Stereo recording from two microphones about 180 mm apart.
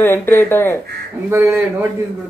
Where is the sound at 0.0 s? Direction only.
10° left (ahead or behind).